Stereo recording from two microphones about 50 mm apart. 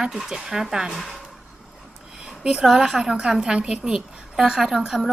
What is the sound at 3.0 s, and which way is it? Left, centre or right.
A woman's voice, centre.